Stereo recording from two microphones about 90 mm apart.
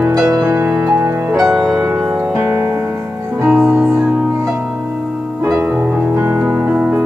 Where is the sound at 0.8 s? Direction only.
20° right (ahead or behind).